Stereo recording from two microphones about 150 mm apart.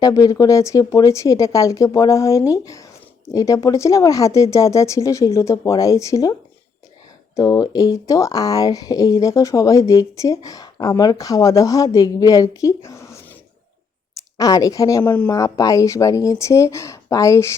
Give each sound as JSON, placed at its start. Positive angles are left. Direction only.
{"t": 0.0, "sound": "speech", "side_deg": 25}
{"t": 7.3, "sound": "speech", "side_deg": 25}
{"t": 14.3, "sound": "speech", "side_deg": 25}